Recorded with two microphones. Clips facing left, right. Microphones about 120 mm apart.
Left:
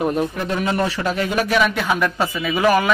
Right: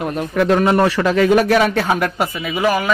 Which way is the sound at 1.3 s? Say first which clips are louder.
Right 2 dB; 50° right (ahead or behind).